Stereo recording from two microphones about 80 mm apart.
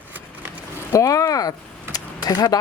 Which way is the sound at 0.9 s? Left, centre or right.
Left.